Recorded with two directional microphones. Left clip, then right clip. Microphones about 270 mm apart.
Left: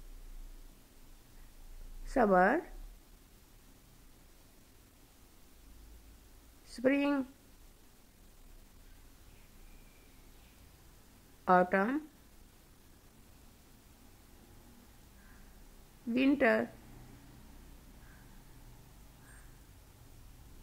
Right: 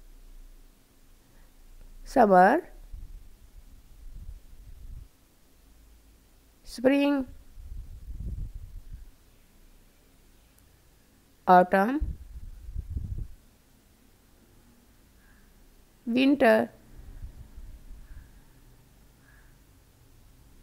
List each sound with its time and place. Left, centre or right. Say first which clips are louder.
2.0 s speech: right 9 dB; right
6.6 s speech: right 7 dB; right
11.4 s speech: right 8 dB; right
16.1 s speech: right 7 dB; right